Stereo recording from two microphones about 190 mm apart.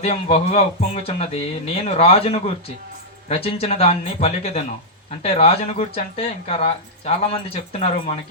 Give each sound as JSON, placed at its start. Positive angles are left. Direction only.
{"t": 0.0, "sound": "speech", "side_deg": 35}